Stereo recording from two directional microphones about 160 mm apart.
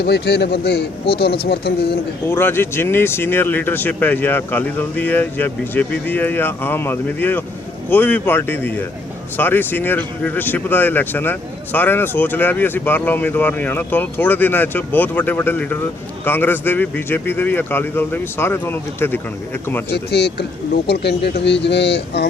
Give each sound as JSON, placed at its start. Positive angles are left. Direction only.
{"t": 0.0, "sound": "a man's voice", "side_deg": 90}
{"t": 2.2, "sound": "speech", "side_deg": 15}
{"t": 19.9, "sound": "speech", "side_deg": 90}